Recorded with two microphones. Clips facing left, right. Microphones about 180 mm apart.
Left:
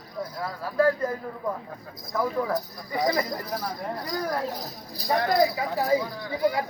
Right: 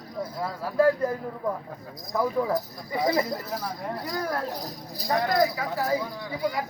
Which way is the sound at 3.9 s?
5° right (ahead or behind).